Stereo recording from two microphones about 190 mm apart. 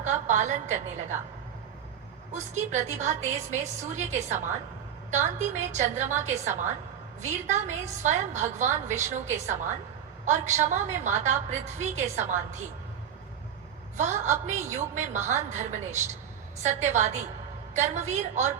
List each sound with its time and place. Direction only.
0.0 s a woman's voice: 40° right (ahead or behind)
2.3 s a woman's voice: 40° right (ahead or behind)
13.9 s a woman's voice: 40° right (ahead or behind)